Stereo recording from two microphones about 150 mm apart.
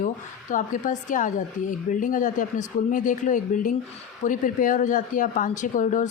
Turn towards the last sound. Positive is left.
turn(degrees=60)  # may be behind; listen again after turning